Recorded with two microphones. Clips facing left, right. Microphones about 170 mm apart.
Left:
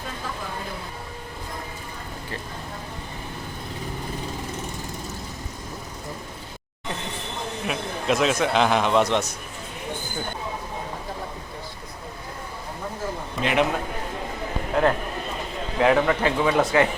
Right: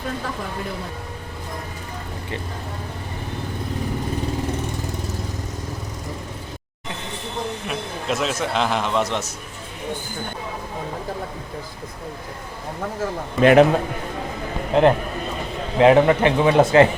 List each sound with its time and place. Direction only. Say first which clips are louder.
7.7 s a man's voice: left 5 dB; centre (ahead or behind)
13.4 s a man's voice: right 10 dB; 50° right (ahead or behind)
14.7 s a man's voice: right 6 dB; 25° right (ahead or behind)